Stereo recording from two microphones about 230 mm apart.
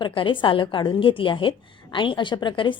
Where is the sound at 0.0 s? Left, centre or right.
Left.